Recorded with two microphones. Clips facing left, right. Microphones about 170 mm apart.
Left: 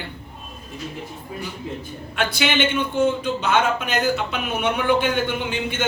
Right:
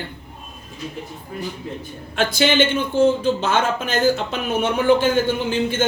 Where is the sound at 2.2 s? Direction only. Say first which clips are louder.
Right 4 dB; 35° right (ahead or behind).